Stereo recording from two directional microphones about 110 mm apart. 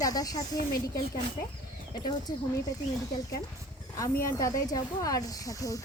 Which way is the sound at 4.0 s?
30° left (ahead or behind).